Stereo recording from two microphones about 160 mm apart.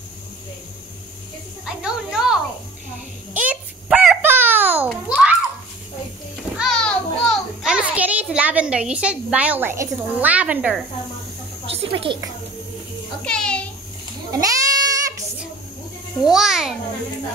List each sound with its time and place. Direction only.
1.7 s speech: 5° right (ahead or behind)
3.3 s a sound: 5° right (ahead or behind)
5.0 s children playing: 5° right (ahead or behind)
6.5 s children playing: centre (ahead or behind)
11.7 s speech: 35° right (ahead or behind)
13.2 s a sound: 5° left (ahead or behind)
14.3 s goat: 20° right (ahead or behind)
16.3 s a child's voice: 5° right (ahead or behind)